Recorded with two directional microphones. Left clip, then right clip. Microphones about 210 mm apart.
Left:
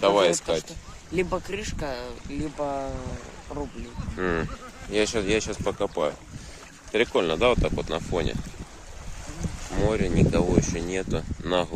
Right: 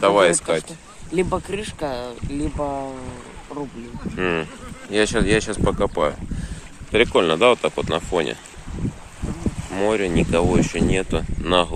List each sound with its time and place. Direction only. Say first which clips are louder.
0.0 s speech: right 5 dB; 5° left (ahead or behind)
1.1 s speech: right 5 dB; 20° right (ahead or behind)
2.6 s speech: even; centre (ahead or behind)
9.7 s speech: right 5 dB; centre (ahead or behind)